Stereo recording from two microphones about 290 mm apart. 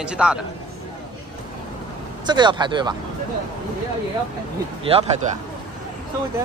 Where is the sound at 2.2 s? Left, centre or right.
Centre.